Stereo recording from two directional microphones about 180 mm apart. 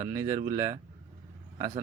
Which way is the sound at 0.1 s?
15° right (ahead or behind).